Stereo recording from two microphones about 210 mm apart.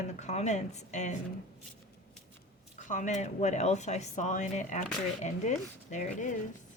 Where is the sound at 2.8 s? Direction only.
35° left (ahead or behind).